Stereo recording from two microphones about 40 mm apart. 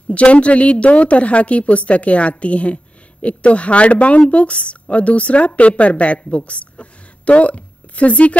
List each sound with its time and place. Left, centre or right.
0.1 s a woman's voice: left